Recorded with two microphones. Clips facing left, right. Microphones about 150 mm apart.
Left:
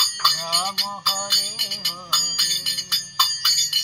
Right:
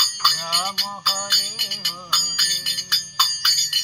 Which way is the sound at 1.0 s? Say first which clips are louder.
Even; centre (ahead or behind).